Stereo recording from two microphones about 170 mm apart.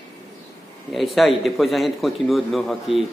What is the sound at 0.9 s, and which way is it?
A man's voice, centre (ahead or behind).